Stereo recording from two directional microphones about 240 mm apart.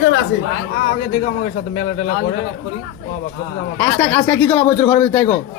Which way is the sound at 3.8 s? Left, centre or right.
Centre.